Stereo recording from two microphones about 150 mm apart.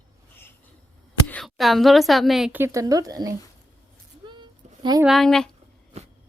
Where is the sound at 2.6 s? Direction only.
20° right (ahead or behind).